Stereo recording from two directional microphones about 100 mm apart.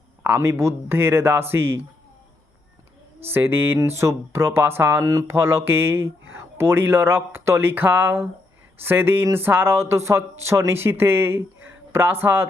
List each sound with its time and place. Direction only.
0.3 s speech: 25° right (ahead or behind)
3.2 s speech: 20° right (ahead or behind)